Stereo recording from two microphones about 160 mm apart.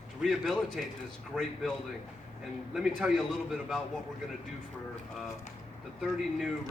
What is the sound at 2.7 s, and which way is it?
Speech, 5° right (ahead or behind).